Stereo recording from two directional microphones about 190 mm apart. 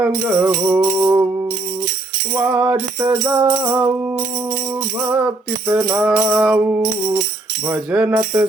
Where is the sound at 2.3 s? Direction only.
10° right (ahead or behind).